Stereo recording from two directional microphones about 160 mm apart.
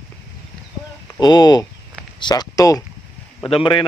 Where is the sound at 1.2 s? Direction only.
25° left (ahead or behind).